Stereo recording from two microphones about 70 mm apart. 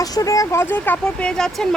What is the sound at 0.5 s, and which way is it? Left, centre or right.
Speech, left.